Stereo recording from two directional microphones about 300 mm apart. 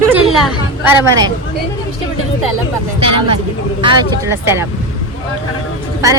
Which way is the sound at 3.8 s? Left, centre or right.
Centre.